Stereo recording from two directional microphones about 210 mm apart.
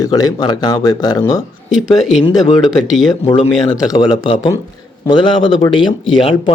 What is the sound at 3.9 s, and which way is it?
Speech, 20° left (ahead or behind).